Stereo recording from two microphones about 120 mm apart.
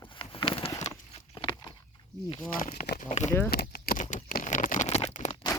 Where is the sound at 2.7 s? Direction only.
80° left.